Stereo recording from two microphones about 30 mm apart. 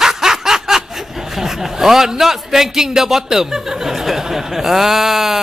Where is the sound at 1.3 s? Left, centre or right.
Centre.